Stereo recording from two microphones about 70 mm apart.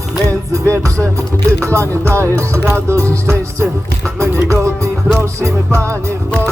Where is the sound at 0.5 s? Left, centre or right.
Right.